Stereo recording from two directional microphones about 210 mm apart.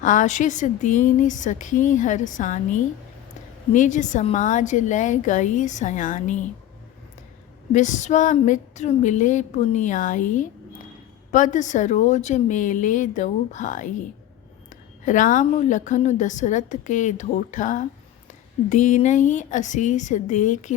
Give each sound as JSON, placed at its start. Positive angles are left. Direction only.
{"t": 0.0, "sound": "a woman's voice", "side_deg": 40}
{"t": 7.7, "sound": "a woman's voice", "side_deg": 35}